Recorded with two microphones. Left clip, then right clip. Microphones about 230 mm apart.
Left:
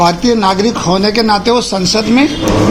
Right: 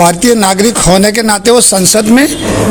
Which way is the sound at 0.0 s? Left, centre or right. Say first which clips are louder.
Right 3 dB; right.